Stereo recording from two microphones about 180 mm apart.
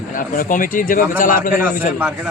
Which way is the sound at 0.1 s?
50° left (ahead or behind).